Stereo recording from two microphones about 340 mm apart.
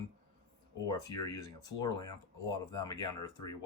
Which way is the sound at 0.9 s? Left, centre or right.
Centre.